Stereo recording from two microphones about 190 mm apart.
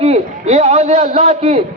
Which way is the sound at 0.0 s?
35° right (ahead or behind).